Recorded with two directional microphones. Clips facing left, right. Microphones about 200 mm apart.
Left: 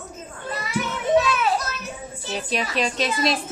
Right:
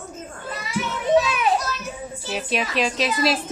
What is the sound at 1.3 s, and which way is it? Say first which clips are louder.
Children playing: right 1 dB; 15° right (ahead or behind).